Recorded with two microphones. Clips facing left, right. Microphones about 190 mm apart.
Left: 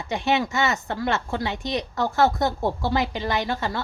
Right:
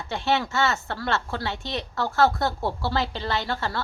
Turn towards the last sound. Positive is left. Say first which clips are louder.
# left 2 dB
turn(degrees=15)  # may be behind; listen again after turning